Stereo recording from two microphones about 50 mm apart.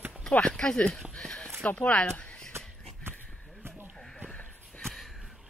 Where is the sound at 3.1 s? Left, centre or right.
Right.